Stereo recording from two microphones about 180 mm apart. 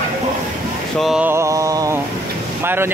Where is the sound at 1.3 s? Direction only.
15° right (ahead or behind).